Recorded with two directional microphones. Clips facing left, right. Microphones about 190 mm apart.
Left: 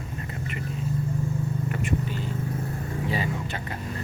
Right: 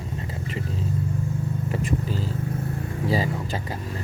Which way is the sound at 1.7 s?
35° right (ahead or behind).